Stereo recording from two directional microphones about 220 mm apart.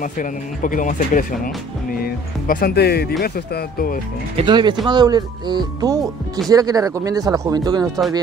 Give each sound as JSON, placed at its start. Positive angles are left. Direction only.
{"t": 0.0, "sound": "speech", "side_deg": 35}
{"t": 4.4, "sound": "speech", "side_deg": -20}